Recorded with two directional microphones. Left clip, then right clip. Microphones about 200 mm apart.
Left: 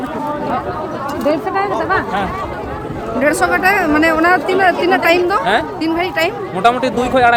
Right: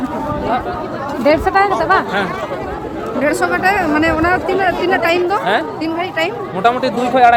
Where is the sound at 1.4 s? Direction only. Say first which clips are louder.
Right 4 dB; 10° right (ahead or behind).